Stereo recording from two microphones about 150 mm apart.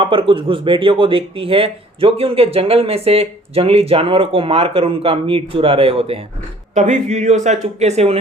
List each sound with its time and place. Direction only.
0.0 s speech: 35° right (ahead or behind)